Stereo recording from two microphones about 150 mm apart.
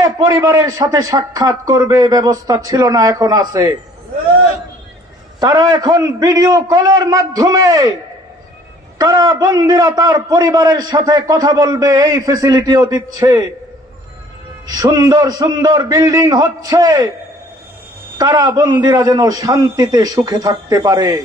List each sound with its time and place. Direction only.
0.0 s a man's voice: 25° right (ahead or behind)
5.4 s a man's voice: 25° right (ahead or behind)
8.9 s a man's voice: 25° right (ahead or behind)
14.7 s a man's voice: 20° right (ahead or behind)
18.1 s a man's voice: 25° right (ahead or behind)